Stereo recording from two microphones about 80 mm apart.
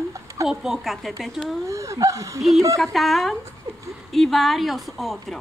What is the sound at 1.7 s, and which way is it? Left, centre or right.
Speech, right.